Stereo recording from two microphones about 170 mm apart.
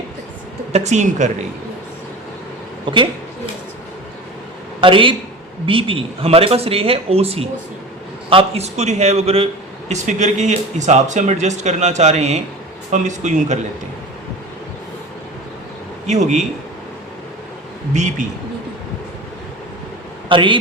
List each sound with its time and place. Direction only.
0.7 s speech: 45° right (ahead or behind)
2.8 s a sound: 30° right (ahead or behind)
4.8 s speech: 30° right (ahead or behind)
16.0 s speech: 45° right (ahead or behind)
17.9 s speech: 45° right (ahead or behind)
20.2 s speech: 30° right (ahead or behind)